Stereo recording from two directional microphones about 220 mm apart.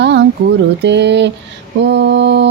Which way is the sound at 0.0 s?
50° right (ahead or behind).